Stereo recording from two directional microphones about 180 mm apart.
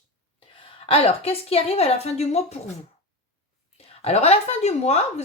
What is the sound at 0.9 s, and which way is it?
Speech, 30° left (ahead or behind).